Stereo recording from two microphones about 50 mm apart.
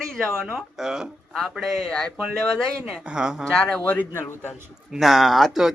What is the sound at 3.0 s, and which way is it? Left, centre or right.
Speech, centre.